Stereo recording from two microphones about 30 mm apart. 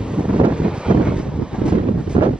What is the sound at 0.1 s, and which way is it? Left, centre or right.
Wind noise, right.